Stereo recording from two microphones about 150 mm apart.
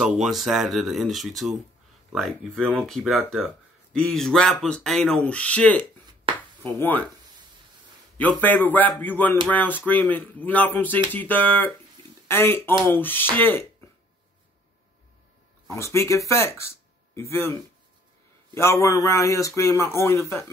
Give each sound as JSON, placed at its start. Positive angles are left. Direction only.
{"t": 0.0, "sound": "speech", "side_deg": 0}
{"t": 8.2, "sound": "speech", "side_deg": 10}
{"t": 15.7, "sound": "speech", "side_deg": 20}